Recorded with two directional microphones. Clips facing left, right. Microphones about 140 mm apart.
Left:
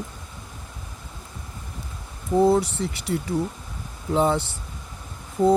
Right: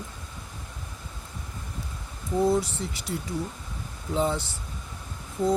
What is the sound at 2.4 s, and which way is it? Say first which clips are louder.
Speech: left 5 dB; 65° left (ahead or behind).